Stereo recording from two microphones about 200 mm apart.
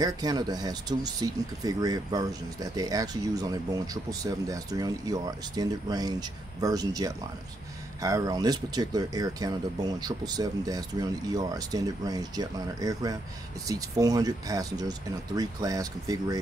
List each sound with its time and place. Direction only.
0.0 s speech: 20° right (ahead or behind)